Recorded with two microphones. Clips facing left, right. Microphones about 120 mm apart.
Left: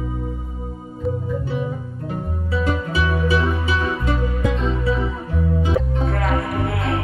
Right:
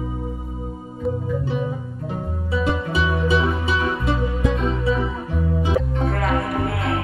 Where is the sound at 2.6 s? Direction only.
15° right (ahead or behind).